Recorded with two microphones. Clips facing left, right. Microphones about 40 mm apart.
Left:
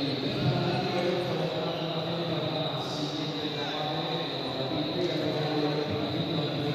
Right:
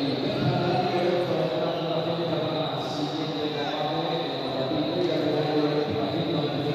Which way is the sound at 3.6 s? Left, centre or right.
Centre.